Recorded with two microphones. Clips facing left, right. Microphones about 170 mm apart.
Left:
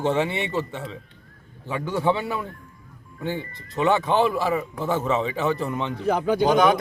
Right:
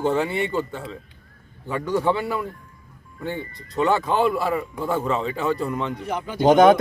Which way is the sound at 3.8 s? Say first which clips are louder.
Even; centre (ahead or behind).